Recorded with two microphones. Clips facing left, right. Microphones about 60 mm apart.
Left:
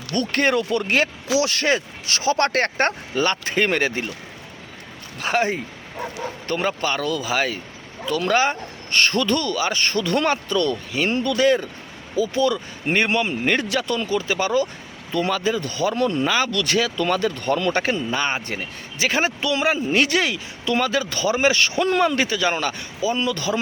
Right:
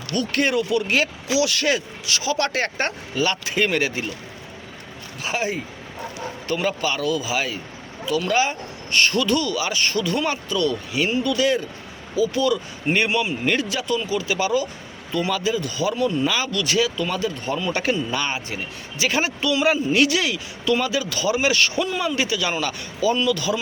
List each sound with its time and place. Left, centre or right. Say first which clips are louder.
0.1 s speech: left 1 dB; left
5.2 s speech: left 4 dB; left
16.2 s speech: left 2 dB; left
17.7 s speech: left 1 dB; left
18.3 s speech: left 1 dB; left
21.8 s speech: left 4 dB; left